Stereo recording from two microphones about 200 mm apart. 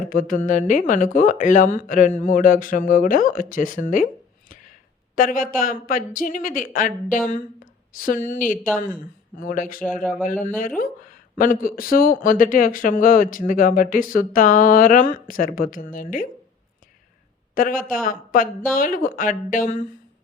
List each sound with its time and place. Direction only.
0.1 s speech: 45° left (ahead or behind)
17.5 s speech: 45° left (ahead or behind)